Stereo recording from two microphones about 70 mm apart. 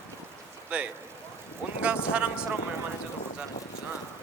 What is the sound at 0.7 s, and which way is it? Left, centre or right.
A man's voice, centre.